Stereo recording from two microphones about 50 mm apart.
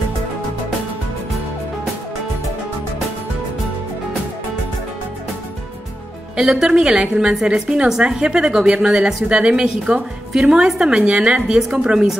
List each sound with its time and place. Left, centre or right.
6.3 s a woman's voice: centre